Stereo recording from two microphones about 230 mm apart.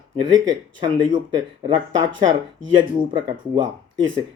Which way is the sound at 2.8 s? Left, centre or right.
Centre.